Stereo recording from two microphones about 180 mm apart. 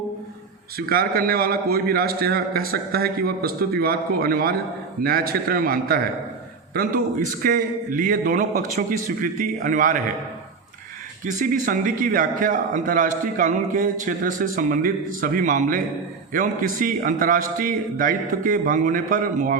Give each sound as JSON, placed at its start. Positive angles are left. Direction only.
{"t": 0.8, "sound": "a man's voice", "side_deg": -55}
{"t": 11.3, "sound": "a man's voice", "side_deg": -45}